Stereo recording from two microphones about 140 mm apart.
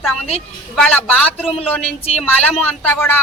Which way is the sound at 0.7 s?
10° left (ahead or behind).